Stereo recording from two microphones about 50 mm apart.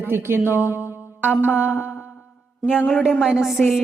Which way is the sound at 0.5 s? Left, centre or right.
Right.